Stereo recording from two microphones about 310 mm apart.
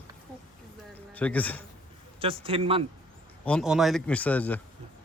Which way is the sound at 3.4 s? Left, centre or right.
Centre.